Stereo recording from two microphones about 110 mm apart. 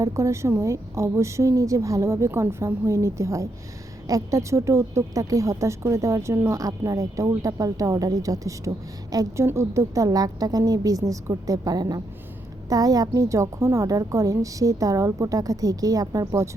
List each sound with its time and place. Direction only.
0.0 s a woman's voice: 25° right (ahead or behind)